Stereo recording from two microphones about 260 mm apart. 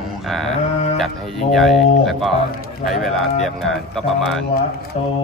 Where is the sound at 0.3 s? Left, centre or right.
Centre.